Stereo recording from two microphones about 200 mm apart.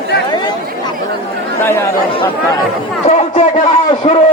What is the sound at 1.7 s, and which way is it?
Speech, 15° left (ahead or behind).